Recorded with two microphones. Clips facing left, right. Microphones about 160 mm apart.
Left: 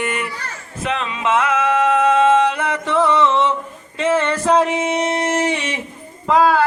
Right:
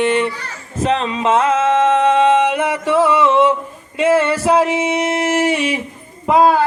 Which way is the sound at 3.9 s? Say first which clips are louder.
Right 4 dB; 10° right (ahead or behind).